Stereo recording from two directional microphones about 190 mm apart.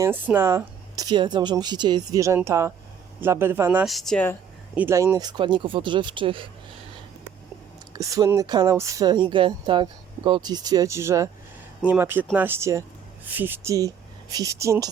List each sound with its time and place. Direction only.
0.0 s speech: 10° right (ahead or behind); by 4.4 s 5° left (ahead or behind)
4.7 s speech: 10° right (ahead or behind); by 6.5 s 25° right (ahead or behind)
7.9 s speech: 15° right (ahead or behind)